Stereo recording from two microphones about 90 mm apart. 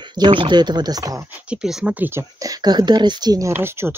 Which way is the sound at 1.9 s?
20° right (ahead or behind).